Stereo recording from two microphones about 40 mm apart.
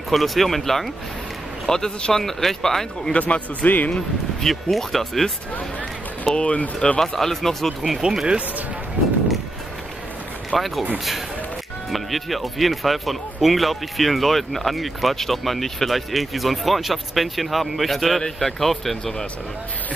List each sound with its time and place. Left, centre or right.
0.1 s speech: centre
3.1 s a man's voice: left
3.9 s speech: centre
6.3 s a man's voice: left
7.0 s speech: centre
8.0 s speech: right
10.5 s speech: centre
11.9 s speech: centre